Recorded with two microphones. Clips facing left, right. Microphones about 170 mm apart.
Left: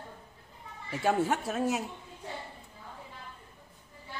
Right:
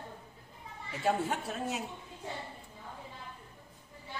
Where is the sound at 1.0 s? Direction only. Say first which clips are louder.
Left 4 dB; 80° left.